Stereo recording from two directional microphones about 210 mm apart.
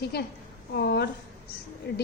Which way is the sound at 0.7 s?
50° left (ahead or behind).